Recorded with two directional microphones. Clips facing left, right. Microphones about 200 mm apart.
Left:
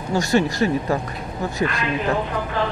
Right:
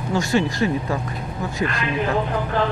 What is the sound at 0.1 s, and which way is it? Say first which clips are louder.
Speech: left 1 dB; 40° left (ahead or behind).